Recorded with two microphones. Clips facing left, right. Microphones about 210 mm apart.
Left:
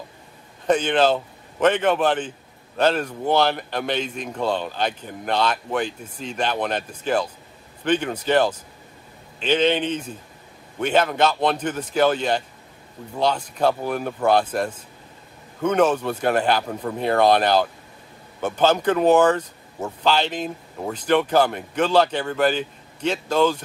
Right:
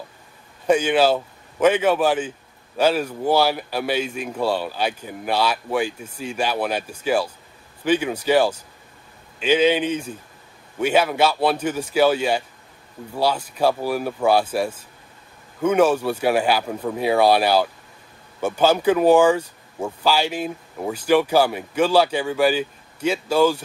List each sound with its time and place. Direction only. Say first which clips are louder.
0.7 s speech: right 1 dB; 10° right (ahead or behind)